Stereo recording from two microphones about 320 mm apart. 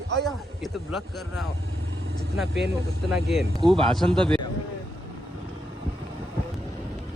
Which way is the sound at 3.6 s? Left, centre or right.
Centre.